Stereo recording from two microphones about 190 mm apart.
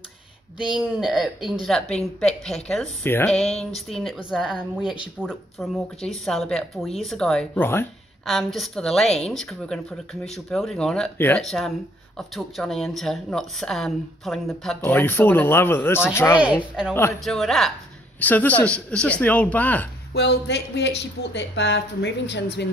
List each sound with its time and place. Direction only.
0.7 s a woman's voice: centre (ahead or behind)
8.3 s a woman's voice: centre (ahead or behind)
17.2 s a woman's voice: centre (ahead or behind)
20.2 s speech: 60° left (ahead or behind)